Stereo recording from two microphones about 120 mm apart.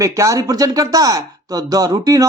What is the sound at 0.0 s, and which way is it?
Speech, 25° right (ahead or behind).